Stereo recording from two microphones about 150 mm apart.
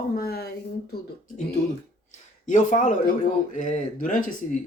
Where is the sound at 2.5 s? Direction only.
55° left (ahead or behind).